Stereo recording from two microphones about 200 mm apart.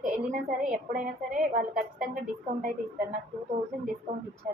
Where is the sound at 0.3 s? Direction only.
45° right (ahead or behind).